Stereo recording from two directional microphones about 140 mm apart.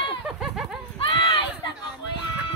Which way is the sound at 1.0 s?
40° left (ahead or behind).